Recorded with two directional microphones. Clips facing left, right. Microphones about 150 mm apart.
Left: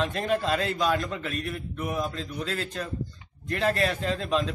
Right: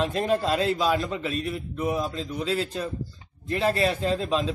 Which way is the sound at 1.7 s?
20° right (ahead or behind).